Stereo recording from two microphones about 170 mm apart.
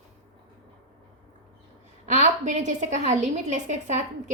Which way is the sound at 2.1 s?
45° right (ahead or behind).